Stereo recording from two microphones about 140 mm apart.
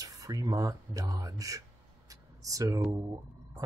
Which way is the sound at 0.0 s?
25° right (ahead or behind).